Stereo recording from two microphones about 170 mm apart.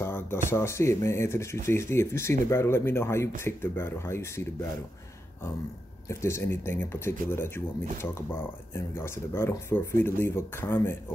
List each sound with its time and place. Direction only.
0.0 s a sound: 15° left (ahead or behind)
0.5 s speech: 15° left (ahead or behind)
6.0 s speech: 15° left (ahead or behind)